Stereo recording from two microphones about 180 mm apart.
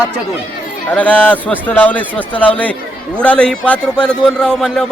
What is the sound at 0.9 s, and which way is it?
A man's voice, 10° left (ahead or behind).